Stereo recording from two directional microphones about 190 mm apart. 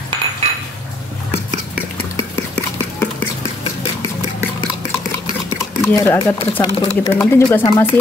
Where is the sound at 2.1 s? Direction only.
10° left (ahead or behind).